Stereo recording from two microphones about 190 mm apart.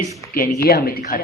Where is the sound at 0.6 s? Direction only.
50° left (ahead or behind).